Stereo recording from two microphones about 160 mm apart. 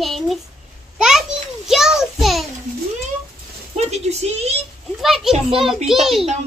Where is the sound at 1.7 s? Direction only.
5° right (ahead or behind).